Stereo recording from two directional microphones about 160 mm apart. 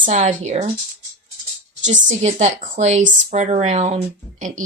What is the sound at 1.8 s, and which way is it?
A woman's voice, 50° right (ahead or behind).